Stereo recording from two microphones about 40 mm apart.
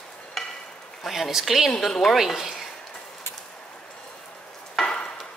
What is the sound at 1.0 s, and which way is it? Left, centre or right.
Speech, centre.